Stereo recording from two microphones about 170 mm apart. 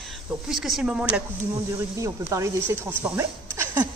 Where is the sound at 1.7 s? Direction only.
20° right (ahead or behind).